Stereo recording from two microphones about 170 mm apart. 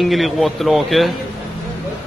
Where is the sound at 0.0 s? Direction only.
Centre (ahead or behind).